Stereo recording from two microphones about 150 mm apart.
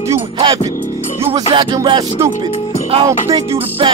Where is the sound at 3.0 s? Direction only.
20° right (ahead or behind).